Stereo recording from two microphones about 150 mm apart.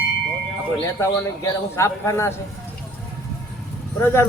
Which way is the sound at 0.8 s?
20° left (ahead or behind).